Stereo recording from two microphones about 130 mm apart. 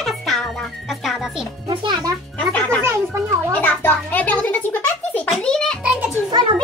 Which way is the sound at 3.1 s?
20° right (ahead or behind).